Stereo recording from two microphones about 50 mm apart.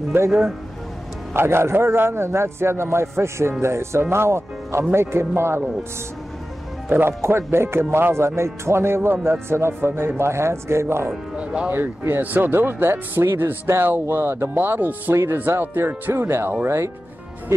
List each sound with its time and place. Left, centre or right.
0.1 s speech: right
1.3 s speech: right
6.9 s speech: right
7.2 s speech: right
11.1 s speech: centre
12.2 s speech: right
14.6 s speech: right
15.5 s speech: right
16.6 s speech: right